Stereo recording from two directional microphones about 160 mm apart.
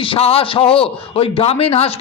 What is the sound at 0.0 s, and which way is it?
A man's voice, 35° left (ahead or behind).